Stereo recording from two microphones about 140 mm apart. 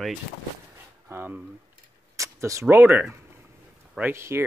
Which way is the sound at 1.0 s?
15° right (ahead or behind).